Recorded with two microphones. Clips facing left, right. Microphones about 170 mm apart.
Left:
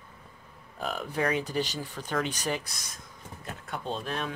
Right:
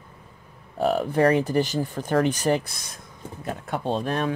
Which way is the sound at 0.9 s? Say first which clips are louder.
Right 10 dB; 55° right (ahead or behind).